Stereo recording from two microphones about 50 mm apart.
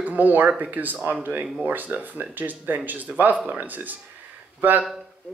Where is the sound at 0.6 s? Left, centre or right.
Right.